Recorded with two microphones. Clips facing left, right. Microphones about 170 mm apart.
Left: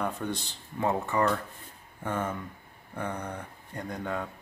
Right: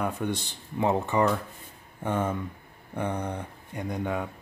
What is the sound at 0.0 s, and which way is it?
Speech, 10° right (ahead or behind).